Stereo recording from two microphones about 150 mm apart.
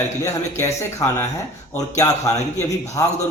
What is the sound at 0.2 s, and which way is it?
A man's voice, 20° left (ahead or behind).